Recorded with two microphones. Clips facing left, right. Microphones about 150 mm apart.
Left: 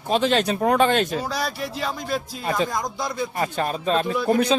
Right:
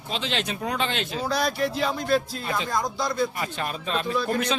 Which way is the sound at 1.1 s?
10° left (ahead or behind).